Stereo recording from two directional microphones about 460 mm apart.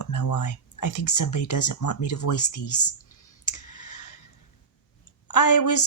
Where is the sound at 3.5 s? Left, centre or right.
Left.